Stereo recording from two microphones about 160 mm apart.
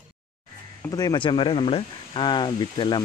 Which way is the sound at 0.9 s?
25° left (ahead or behind).